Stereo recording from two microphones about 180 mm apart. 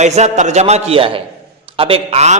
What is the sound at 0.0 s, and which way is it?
A man's voice, 40° right (ahead or behind).